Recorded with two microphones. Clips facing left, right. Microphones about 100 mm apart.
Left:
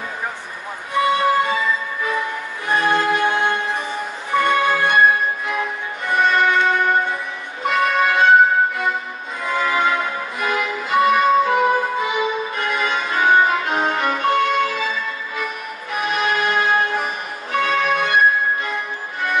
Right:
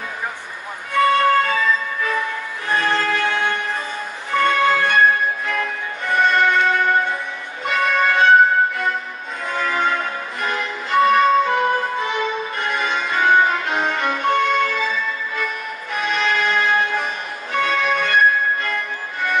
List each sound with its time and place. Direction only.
0.9 s music: 10° left (ahead or behind)
13.9 s violin: 5° left (ahead or behind)
15.4 s music: 5° left (ahead or behind)
16.6 s music: 40° left (ahead or behind)
17.5 s music: 5° left (ahead or behind)